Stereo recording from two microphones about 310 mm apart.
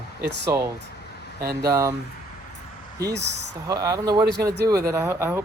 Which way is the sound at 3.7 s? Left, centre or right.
Centre.